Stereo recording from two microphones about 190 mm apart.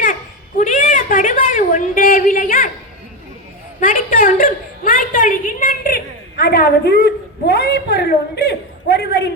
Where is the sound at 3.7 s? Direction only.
45° left (ahead or behind).